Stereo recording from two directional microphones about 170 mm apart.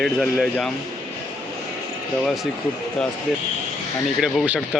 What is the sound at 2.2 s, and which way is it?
Speech, centre (ahead or behind).